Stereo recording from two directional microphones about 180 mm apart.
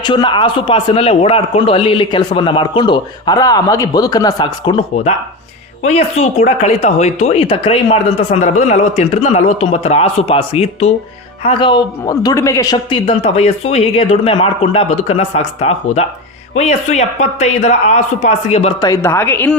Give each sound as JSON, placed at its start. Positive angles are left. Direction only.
{"t": 0.0, "sound": "a man's voice", "side_deg": 25}
{"t": 5.8, "sound": "speech", "side_deg": 35}
{"t": 18.8, "sound": "speech", "side_deg": 15}